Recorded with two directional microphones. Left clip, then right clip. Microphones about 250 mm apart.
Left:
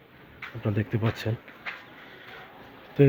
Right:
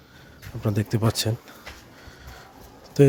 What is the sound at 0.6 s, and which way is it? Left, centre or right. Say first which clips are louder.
Speech: right 4 dB; centre.